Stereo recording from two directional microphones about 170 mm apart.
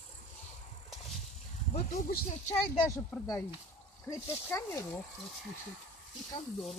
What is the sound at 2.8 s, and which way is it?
Speech, 15° left (ahead or behind).